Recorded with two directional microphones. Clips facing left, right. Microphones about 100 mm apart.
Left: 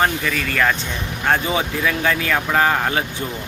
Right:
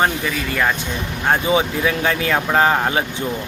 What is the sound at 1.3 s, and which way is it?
Speech, 20° right (ahead or behind).